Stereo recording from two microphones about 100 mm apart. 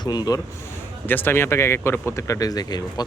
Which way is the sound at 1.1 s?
20° left (ahead or behind).